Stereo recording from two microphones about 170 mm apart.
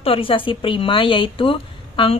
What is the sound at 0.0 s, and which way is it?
A woman's voice, 30° left (ahead or behind).